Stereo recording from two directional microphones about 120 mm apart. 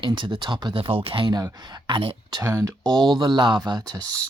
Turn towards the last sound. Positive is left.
turn(degrees=-30)  # may be behind; listen again after turning